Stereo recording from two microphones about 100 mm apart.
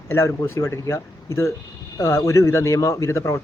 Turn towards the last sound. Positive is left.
turn(degrees=30)  # may be behind; listen again after turning